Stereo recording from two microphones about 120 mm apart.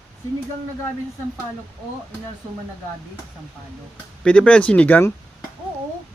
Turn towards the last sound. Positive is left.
turn(degrees=15)  # may be behind; listen again after turning